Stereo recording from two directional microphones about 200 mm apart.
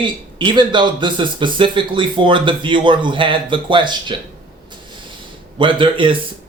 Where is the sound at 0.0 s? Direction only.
25° right (ahead or behind).